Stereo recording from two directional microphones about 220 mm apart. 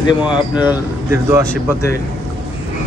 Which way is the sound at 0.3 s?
20° left (ahead or behind).